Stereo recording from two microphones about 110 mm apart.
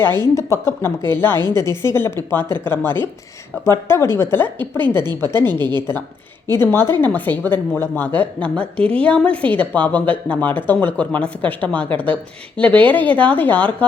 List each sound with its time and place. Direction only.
0.0 s a woman's voice: 20° left (ahead or behind)